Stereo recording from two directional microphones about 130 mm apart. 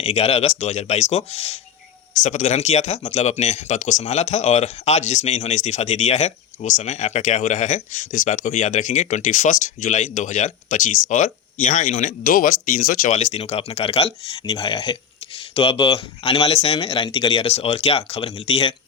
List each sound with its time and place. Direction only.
0.0 s speech: 50° left (ahead or behind)
2.1 s speech: 70° left (ahead or behind); by 14.1 s 50° left (ahead or behind)
14.5 s speech: 30° left (ahead or behind)
15.5 s speech: 45° left (ahead or behind)
17.3 s speech: 50° left (ahead or behind)